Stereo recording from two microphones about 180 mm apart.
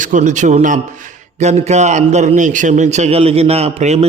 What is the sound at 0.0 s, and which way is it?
A man's voice, 45° right (ahead or behind).